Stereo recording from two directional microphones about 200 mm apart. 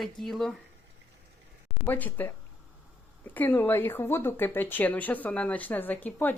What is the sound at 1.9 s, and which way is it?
Speech, 10° left (ahead or behind).